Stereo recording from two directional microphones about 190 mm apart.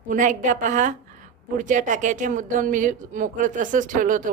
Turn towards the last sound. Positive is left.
turn(degrees=-45)  # may be behind; listen again after turning